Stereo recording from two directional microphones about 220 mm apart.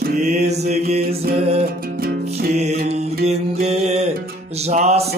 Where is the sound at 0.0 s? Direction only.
35° right (ahead or behind).